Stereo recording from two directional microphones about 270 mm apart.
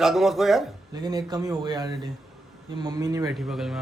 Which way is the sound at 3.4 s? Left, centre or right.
Centre.